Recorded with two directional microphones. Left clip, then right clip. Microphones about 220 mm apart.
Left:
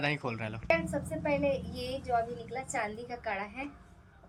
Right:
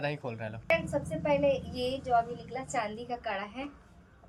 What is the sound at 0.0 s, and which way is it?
Speech, 10° left (ahead or behind).